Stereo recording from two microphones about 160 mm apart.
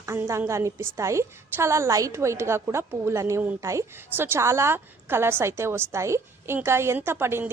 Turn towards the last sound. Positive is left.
turn(degrees=-15)  # may be behind; listen again after turning